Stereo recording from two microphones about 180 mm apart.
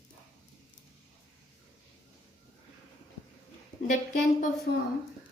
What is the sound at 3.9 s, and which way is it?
Speech, 45° left (ahead or behind).